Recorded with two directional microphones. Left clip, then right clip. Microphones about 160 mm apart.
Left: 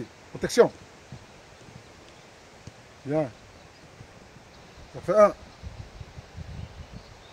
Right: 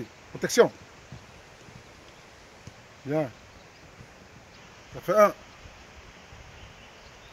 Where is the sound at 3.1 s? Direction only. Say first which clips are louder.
Left 1 dB; 35° right (ahead or behind).